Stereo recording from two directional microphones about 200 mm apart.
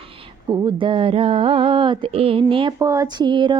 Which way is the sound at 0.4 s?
20° right (ahead or behind).